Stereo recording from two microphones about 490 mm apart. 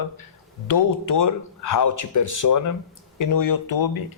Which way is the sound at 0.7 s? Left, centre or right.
Left.